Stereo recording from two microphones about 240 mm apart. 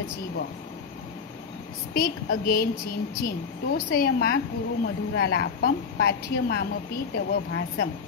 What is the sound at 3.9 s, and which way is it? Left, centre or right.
Speech, left.